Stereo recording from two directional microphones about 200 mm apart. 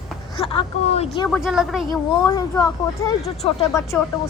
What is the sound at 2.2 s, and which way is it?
Speech, 15° left (ahead or behind).